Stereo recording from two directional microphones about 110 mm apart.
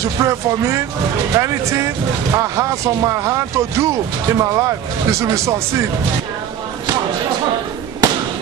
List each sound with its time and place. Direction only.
0.0 s speech: 30° right (ahead or behind)